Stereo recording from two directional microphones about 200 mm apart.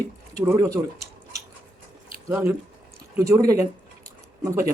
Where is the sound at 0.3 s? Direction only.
15° right (ahead or behind).